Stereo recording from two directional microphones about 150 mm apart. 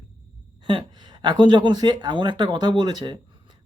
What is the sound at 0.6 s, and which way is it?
Speech, 30° right (ahead or behind).